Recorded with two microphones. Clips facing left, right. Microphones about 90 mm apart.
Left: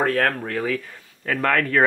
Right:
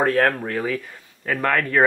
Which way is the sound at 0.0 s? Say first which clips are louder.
Right 2 dB; 25° right (ahead or behind).